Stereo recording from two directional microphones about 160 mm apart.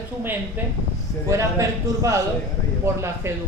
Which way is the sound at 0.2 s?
10° right (ahead or behind).